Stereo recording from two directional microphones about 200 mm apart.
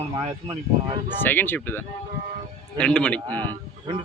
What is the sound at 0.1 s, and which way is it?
Speech, 25° right (ahead or behind).